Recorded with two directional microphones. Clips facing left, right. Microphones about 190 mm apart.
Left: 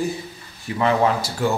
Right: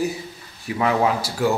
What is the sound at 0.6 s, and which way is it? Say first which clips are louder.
Speech: left 1 dB; 5° right (ahead or behind).